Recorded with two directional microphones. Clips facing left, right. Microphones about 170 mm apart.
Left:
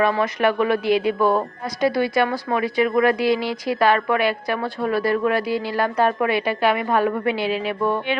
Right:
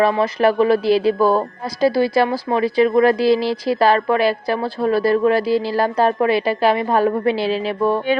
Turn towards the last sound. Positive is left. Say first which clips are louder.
# right 3 dB
turn(degrees=-30)  # may be behind; listen again after turning